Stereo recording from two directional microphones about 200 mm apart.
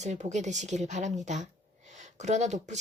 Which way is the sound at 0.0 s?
35° right (ahead or behind).